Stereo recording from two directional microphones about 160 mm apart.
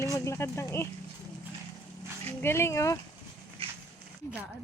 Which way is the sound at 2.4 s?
15° left (ahead or behind).